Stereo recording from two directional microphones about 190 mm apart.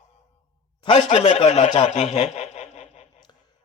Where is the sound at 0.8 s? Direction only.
35° left (ahead or behind).